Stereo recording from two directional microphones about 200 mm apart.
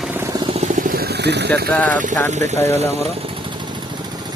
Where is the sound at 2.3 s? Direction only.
35° right (ahead or behind).